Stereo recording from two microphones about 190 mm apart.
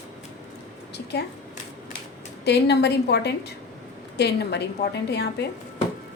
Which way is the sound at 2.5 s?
60° left (ahead or behind).